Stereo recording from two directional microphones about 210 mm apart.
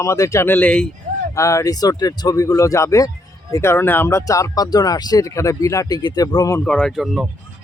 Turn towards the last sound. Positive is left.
turn(degrees=0)  # may be behind; listen again after turning